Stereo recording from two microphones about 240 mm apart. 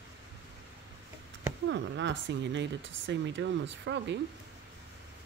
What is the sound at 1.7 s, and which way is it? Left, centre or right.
Speech, right.